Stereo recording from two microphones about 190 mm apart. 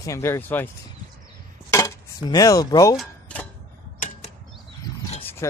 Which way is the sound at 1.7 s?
20° left (ahead or behind).